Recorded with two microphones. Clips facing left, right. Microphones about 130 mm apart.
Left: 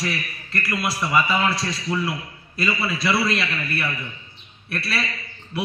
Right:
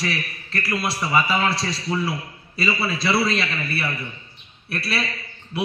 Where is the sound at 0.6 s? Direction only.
30° right (ahead or behind).